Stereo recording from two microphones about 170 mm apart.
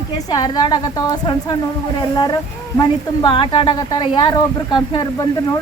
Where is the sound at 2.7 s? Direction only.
25° left (ahead or behind).